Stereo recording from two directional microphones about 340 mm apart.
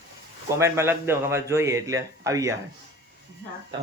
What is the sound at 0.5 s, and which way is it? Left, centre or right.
A man's voice, centre.